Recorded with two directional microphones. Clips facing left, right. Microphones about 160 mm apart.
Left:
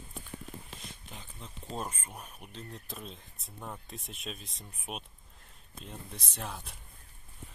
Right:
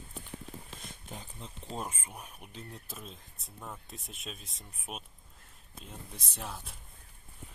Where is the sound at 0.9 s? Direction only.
45° right (ahead or behind).